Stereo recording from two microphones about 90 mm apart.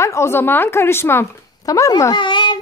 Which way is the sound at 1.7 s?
40° left (ahead or behind).